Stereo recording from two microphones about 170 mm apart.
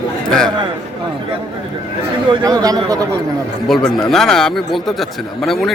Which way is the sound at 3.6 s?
Centre (ahead or behind).